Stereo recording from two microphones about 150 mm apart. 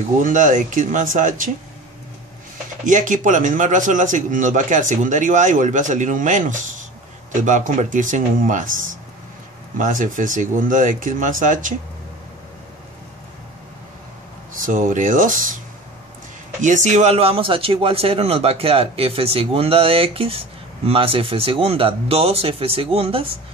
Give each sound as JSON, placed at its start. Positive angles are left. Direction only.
{"t": 0.2, "sound": "a man's voice", "side_deg": -60}
{"t": 2.8, "sound": "a man's voice", "side_deg": -60}
{"t": 14.6, "sound": "a man's voice", "side_deg": -60}
{"t": 16.6, "sound": "speech", "side_deg": -55}